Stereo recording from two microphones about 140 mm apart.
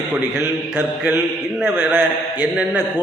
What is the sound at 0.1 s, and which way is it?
Speech, 15° right (ahead or behind).